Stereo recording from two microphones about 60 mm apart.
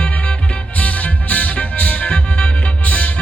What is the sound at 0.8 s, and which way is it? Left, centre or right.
Music, left.